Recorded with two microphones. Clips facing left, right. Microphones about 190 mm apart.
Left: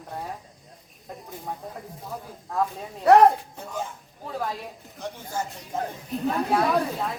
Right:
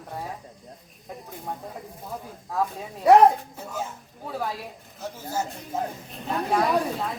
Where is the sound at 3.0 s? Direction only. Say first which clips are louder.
Even; 10° right (ahead or behind).